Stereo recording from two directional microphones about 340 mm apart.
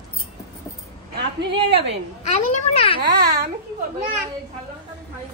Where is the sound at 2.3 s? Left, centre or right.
Centre.